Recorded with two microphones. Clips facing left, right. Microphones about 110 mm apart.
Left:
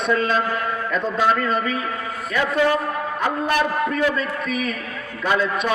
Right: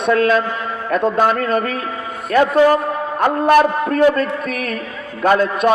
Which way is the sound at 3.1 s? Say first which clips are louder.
Right 10 dB; 55° right (ahead or behind).